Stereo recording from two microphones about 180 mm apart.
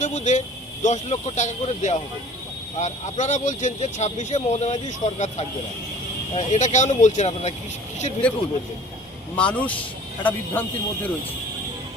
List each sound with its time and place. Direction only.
0.0 s speech: 40° left (ahead or behind)
9.3 s speech: 5° left (ahead or behind)